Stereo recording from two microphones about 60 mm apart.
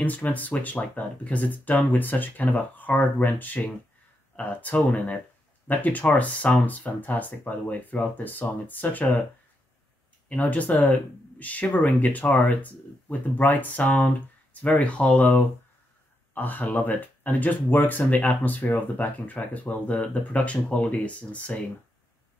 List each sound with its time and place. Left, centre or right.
0.0 s speech: left
10.2 s speech: left